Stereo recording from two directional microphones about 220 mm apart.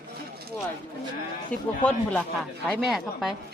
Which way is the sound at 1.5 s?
5° left (ahead or behind).